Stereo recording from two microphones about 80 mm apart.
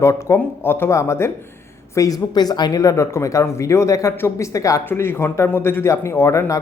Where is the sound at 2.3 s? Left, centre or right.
Left.